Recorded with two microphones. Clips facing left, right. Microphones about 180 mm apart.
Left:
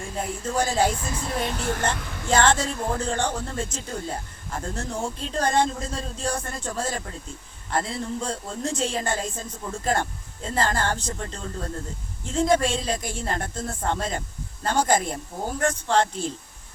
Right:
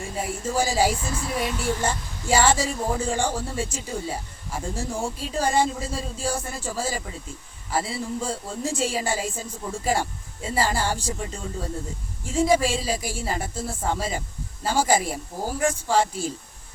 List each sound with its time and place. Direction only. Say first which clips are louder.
0.0 s a man's voice: right 1 dB; 5° right (ahead or behind)
2.0 s a sound: left 4 dB; 65° left (ahead or behind)
2.2 s a man's voice: even; 10° right (ahead or behind)